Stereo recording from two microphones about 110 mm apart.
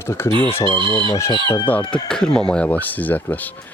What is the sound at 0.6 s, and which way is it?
Chicken, 45° right (ahead or behind).